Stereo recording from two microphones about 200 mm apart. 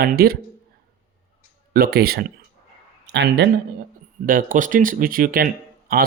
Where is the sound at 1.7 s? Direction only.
50° right (ahead or behind).